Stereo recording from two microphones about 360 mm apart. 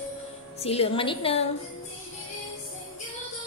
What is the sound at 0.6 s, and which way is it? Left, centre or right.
Speech, centre.